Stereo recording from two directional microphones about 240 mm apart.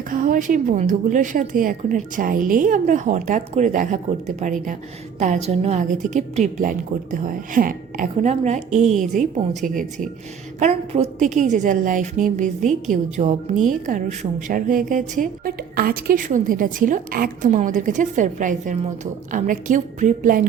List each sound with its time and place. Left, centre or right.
0.1 s a woman's voice: right